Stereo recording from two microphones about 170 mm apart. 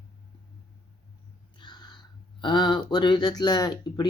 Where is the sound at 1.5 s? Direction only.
25° left (ahead or behind).